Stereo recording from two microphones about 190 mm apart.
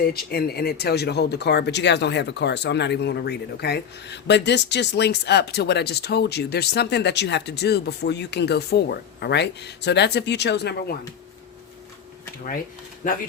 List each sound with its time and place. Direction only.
0.0 s speech: 55° left (ahead or behind)
13.0 s speech: 45° left (ahead or behind)